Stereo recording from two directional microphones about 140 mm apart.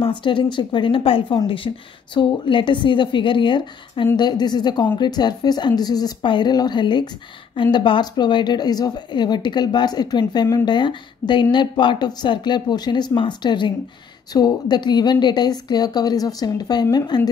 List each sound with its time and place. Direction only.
0.0 s a woman's voice: 35° left (ahead or behind)